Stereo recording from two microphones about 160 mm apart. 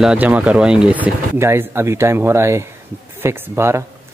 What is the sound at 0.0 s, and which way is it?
Speech, 5° right (ahead or behind).